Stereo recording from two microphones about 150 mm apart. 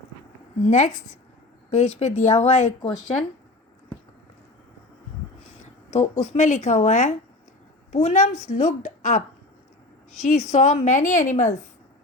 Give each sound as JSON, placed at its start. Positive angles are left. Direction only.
{"t": 0.6, "sound": "a woman's voice", "side_deg": 50}
{"t": 5.9, "sound": "a woman's voice", "side_deg": 50}
{"t": 10.5, "sound": "a woman's voice", "side_deg": 50}